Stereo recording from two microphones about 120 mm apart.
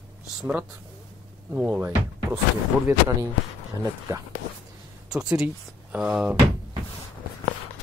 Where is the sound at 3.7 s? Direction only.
30° right (ahead or behind).